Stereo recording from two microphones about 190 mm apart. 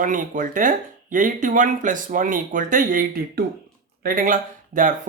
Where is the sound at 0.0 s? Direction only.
45° right (ahead or behind).